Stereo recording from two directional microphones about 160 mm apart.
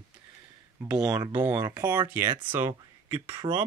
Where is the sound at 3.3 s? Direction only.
30° right (ahead or behind).